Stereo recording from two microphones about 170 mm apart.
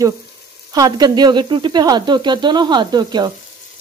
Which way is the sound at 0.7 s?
25° right (ahead or behind).